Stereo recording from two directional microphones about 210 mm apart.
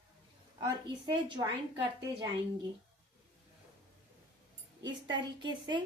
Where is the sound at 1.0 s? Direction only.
20° right (ahead or behind).